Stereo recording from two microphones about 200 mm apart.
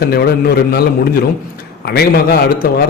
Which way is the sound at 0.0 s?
50° left (ahead or behind).